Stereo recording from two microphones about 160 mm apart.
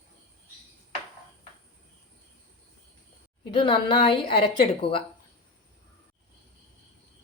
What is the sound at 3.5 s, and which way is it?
Speech, 35° left (ahead or behind).